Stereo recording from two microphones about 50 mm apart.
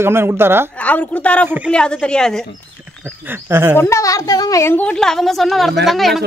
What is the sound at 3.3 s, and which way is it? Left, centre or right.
Speech, right.